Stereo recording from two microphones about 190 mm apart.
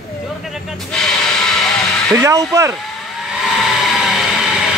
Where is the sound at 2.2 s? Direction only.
15° right (ahead or behind).